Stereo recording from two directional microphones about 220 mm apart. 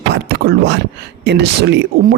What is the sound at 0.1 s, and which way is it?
Speech, 45° right (ahead or behind).